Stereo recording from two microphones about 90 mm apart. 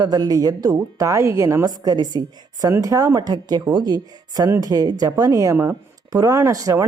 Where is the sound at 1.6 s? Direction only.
45° right (ahead or behind).